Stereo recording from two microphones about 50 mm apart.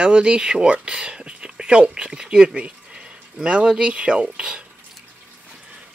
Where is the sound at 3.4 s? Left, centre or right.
Centre.